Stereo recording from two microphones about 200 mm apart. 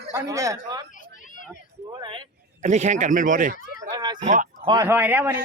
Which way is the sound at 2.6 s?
35° right (ahead or behind).